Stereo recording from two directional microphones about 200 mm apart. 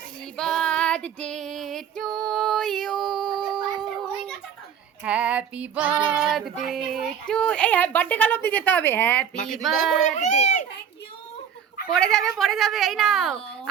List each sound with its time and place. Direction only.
0.3 s female singing: centre (ahead or behind)
3.4 s a sound: centre (ahead or behind)
5.0 s female singing: 5° right (ahead or behind)
6.7 s a woman's voice: centre (ahead or behind)
10.2 s a sound: 35° left (ahead or behind)
11.9 s a woman's voice: 5° left (ahead or behind)